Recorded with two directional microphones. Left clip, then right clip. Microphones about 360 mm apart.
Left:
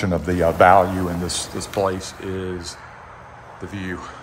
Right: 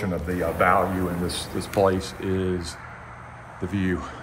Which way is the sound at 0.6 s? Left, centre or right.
Centre.